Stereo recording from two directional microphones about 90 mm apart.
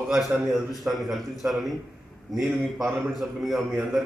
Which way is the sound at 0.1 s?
Centre (ahead or behind).